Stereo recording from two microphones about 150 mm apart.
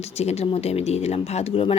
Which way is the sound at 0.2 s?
45° left (ahead or behind).